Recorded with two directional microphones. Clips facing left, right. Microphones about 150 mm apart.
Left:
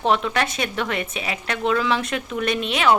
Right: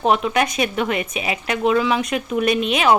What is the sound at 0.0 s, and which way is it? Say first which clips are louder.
A woman's voice: right 3 dB; 10° right (ahead or behind).